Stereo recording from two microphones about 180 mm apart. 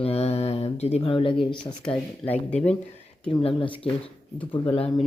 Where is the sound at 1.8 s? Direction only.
10° left (ahead or behind).